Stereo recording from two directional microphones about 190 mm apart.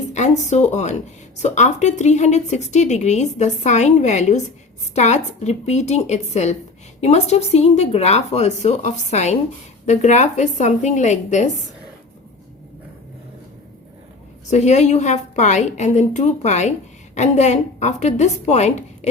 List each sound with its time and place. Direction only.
0.1 s a woman's voice: 35° left (ahead or behind)
14.5 s a woman's voice: 35° left (ahead or behind)